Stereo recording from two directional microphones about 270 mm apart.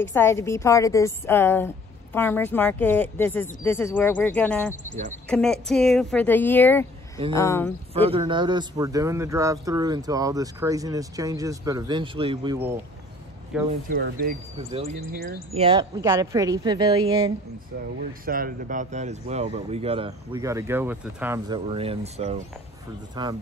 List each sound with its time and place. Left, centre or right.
0.1 s a woman's voice: centre
7.9 s a man's voice: right
13.7 s speech: right
14.7 s a man's voice: right
18.2 s speech: right; by 21.5 s centre
21.6 s a man's voice: right